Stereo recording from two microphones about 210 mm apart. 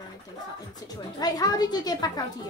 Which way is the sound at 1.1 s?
20° left (ahead or behind).